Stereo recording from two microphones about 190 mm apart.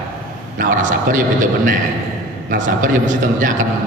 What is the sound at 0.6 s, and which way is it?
Speech, 45° right (ahead or behind).